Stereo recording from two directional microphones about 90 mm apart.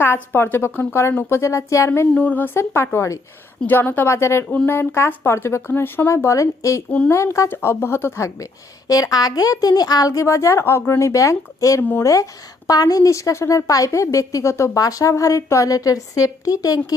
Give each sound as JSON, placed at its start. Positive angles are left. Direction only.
{"t": 0.0, "sound": "speech", "side_deg": 25}
{"t": 2.1, "sound": "a woman's voice", "side_deg": 20}
{"t": 11.8, "sound": "speech", "side_deg": 20}
{"t": 12.0, "sound": "a woman's voice", "side_deg": 35}